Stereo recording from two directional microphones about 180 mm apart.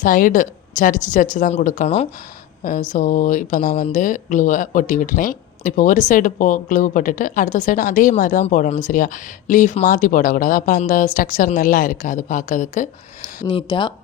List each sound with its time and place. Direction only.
0.0 s speech: 50° left (ahead or behind)
13.4 s speech: 25° left (ahead or behind)